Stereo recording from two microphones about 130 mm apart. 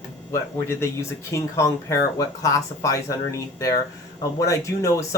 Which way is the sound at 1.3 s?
20° left (ahead or behind).